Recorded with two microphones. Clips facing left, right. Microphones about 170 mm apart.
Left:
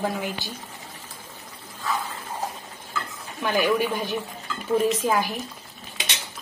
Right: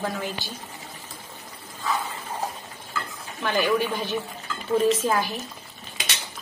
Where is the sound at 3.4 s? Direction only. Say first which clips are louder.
Left 1 dB; 10° left (ahead or behind).